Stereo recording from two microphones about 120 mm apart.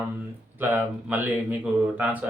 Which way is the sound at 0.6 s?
15° right (ahead or behind).